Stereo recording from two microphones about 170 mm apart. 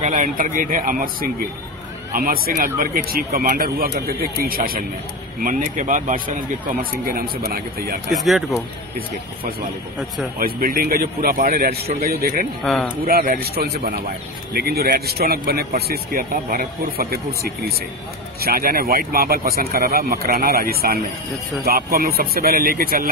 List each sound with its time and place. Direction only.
0.0 s speech: 45° right (ahead or behind)
2.1 s speech: 60° right (ahead or behind)
8.1 s speech: centre (ahead or behind)
10.4 s speech: 60° right (ahead or behind)
12.6 s speech: centre (ahead or behind)
13.0 s speech: 55° right (ahead or behind)